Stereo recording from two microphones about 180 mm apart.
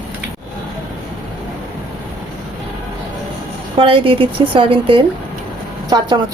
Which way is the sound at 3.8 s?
30° right (ahead or behind).